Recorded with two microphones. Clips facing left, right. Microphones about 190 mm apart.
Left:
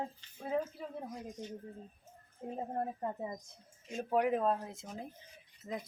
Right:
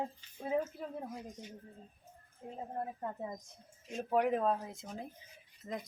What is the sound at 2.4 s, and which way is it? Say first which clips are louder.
Speech: left 5 dB; 50° left (ahead or behind).